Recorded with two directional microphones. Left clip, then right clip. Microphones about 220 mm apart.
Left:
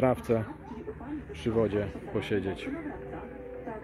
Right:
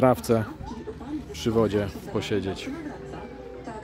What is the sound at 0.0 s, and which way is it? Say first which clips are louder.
Speech: right 5 dB; 15° right (ahead or behind).